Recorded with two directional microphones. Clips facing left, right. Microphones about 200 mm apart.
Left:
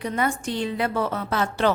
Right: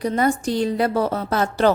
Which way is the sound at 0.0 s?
35° right (ahead or behind).